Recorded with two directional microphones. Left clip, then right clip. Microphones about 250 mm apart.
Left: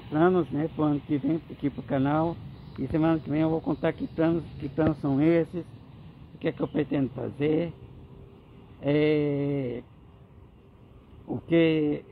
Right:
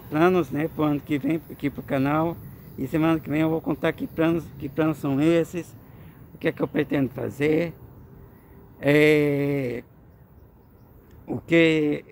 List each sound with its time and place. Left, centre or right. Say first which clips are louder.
0.1 s speech: right 3 dB; centre
6.4 s speech: right 4 dB; centre
8.8 s a sound: right 6 dB; right
11.2 s speech: right 4 dB; centre